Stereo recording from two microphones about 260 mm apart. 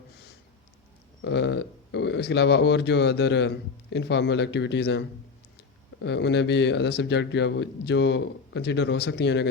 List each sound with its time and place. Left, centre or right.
1.2 s speech: left